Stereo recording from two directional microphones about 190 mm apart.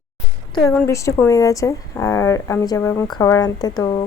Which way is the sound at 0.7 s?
10° left (ahead or behind).